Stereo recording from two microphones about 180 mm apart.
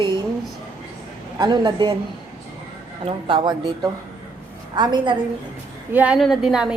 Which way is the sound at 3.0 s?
30° right (ahead or behind).